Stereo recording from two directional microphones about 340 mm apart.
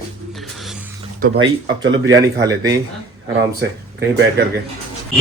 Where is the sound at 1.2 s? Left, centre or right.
Right.